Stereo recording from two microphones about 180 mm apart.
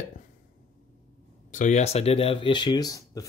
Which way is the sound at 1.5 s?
45° left (ahead or behind).